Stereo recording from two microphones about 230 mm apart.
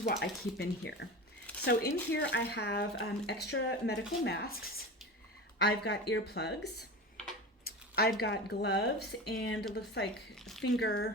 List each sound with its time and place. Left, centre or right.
0.0 s speech: left
5.8 s speech: left
7.6 s a sound: left
8.2 s speech: left
10.3 s speech: centre
10.6 s speech: left